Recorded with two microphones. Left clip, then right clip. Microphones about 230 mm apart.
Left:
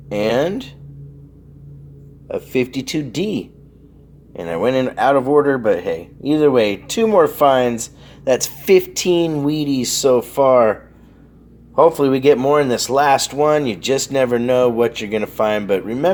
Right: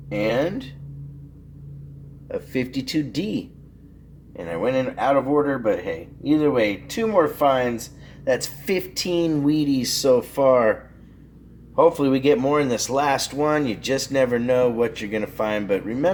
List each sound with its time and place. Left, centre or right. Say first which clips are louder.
0.1 s speech: left 5 dB; left
2.2 s speech: left 7 dB; left